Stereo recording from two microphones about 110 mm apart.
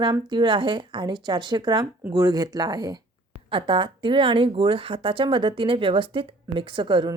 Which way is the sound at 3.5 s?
50° right (ahead or behind).